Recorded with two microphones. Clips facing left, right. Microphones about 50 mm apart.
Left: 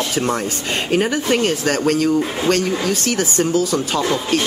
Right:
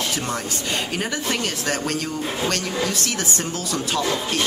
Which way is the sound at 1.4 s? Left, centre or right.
Left.